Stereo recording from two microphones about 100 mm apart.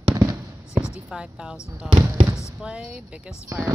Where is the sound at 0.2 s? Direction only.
45° right (ahead or behind).